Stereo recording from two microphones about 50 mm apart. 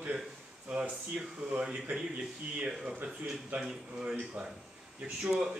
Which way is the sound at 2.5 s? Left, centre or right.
Right.